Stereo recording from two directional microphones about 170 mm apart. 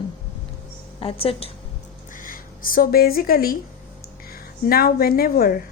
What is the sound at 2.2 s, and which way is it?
Speech, 55° left (ahead or behind).